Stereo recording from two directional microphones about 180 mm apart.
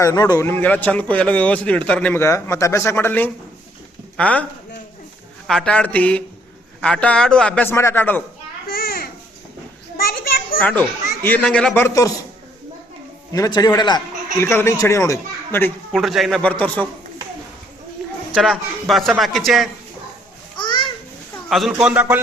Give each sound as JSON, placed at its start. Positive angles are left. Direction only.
{"t": 0.0, "sound": "a child's voice", "side_deg": 20}
{"t": 5.5, "sound": "a child's voice", "side_deg": 5}
{"t": 8.6, "sound": "a sound", "side_deg": 55}
{"t": 10.6, "sound": "a child's voice", "side_deg": 10}
{"t": 13.3, "sound": "a man's voice", "side_deg": 20}
{"t": 16.0, "sound": "a man's voice", "side_deg": 0}
{"t": 18.3, "sound": "a man's voice", "side_deg": -5}
{"t": 20.6, "sound": "children playing", "side_deg": 25}
{"t": 21.5, "sound": "a man's voice", "side_deg": 0}